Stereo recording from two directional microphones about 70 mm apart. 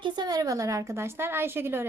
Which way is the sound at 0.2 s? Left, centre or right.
Right.